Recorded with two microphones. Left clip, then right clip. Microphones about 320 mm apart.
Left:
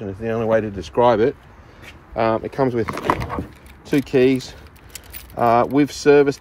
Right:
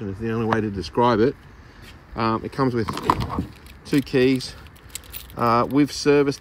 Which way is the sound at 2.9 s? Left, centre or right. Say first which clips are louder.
Left 1 dB; centre.